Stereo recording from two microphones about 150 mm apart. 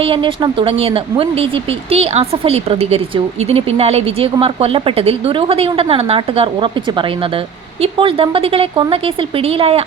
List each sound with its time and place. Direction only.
0.0 s a woman's voice: 35° right (ahead or behind)
7.8 s a woman's voice: 35° right (ahead or behind)